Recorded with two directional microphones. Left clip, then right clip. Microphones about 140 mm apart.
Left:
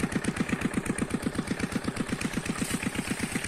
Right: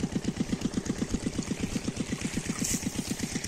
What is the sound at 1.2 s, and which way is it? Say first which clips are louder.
Engine: left 2 dB; 15° right (ahead or behind).